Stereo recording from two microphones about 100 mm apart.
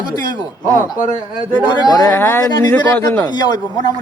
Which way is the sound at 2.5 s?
40° left (ahead or behind).